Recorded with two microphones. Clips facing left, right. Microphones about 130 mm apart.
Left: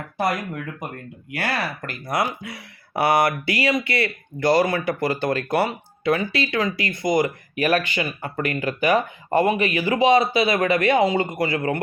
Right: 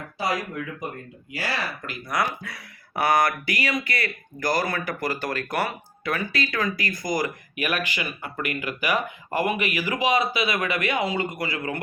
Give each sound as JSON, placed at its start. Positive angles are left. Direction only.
{"t": 0.2, "sound": "speech", "side_deg": 55}
{"t": 2.0, "sound": "speech", "side_deg": 25}